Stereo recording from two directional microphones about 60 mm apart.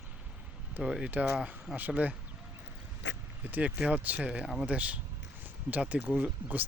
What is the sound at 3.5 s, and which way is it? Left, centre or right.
Speech, right.